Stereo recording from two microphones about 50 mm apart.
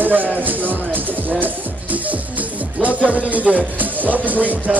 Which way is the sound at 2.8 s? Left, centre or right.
Right.